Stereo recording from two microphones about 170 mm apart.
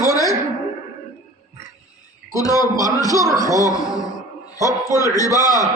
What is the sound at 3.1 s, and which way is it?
Speech, 20° right (ahead or behind).